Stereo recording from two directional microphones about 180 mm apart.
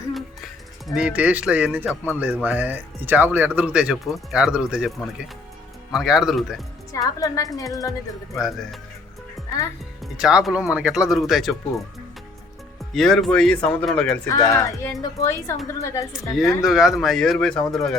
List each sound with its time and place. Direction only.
0.9 s speech: 5° right (ahead or behind)
6.9 s a woman's voice: 20° left (ahead or behind)
8.4 s speech: centre (ahead or behind)
10.0 s speech: 5° right (ahead or behind)
12.9 s speech: centre (ahead or behind)
16.4 s speech: centre (ahead or behind)